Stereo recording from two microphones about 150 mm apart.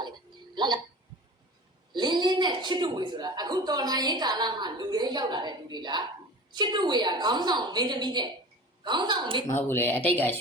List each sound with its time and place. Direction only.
0.5 s speech: 30° right (ahead or behind)
1.9 s a man's voice: 30° right (ahead or behind)
9.5 s speech: 15° left (ahead or behind)